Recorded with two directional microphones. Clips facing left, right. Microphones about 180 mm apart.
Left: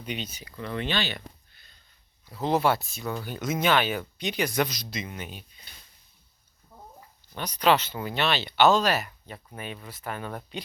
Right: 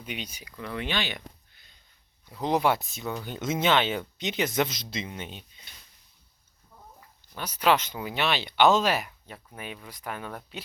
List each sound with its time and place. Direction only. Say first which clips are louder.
0.0 s speech: left 3 dB; 10° right (ahead or behind); by 5.5 s 25° right (ahead or behind)
7.3 s speech: left 1 dB; 10° right (ahead or behind)
9.0 s speech: left 2 dB; 5° right (ahead or behind)